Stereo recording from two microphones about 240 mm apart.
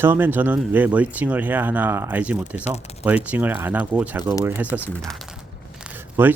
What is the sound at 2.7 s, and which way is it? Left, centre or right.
Speech, left.